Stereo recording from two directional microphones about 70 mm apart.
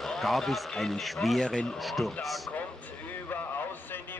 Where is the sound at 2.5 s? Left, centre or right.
Left.